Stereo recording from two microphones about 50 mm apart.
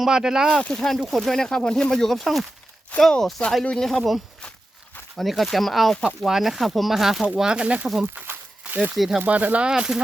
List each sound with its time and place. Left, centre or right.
0.0 s speech: centre
0.7 s speech: centre
5.1 s speech: centre
7.3 s speech: centre
8.7 s speech: right
9.0 s speech: centre
9.2 s speech: right
9.6 s speech: centre